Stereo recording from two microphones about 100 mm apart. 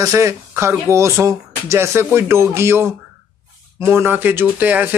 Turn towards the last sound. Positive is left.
turn(degrees=-15)  # may be behind; listen again after turning